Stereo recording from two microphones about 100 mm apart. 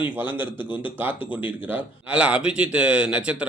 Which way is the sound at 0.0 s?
20° right (ahead or behind).